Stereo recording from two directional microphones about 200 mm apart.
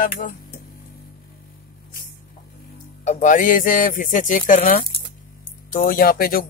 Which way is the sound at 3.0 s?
40° left (ahead or behind).